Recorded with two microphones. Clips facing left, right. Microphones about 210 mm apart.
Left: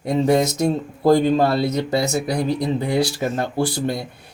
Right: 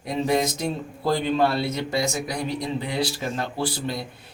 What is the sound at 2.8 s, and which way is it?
Speech, 45° left (ahead or behind).